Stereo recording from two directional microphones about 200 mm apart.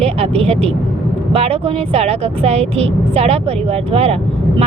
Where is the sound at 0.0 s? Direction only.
30° right (ahead or behind).